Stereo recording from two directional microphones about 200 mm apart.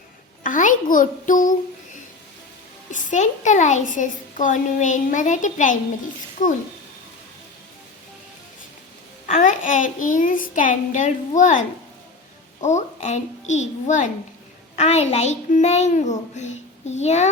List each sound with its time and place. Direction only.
0.4 s a sound: 40° left (ahead or behind)
2.9 s a child's voice: 35° left (ahead or behind)
9.2 s a child's voice: 40° left (ahead or behind)
12.6 s a child's voice: 35° left (ahead or behind)